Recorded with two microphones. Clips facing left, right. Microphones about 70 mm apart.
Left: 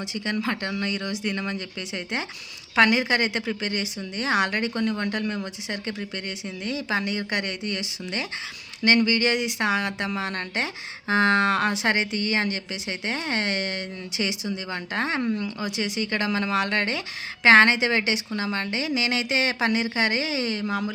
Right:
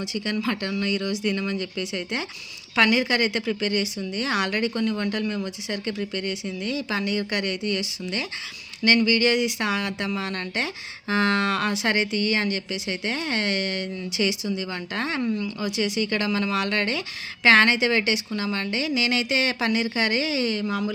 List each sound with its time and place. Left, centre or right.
0.4 s speech: left
2.7 s speech: left